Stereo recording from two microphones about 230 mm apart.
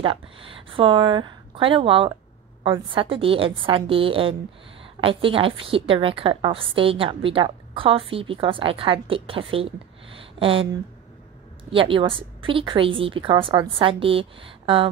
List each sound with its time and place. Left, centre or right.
0.7 s a woman's voice: right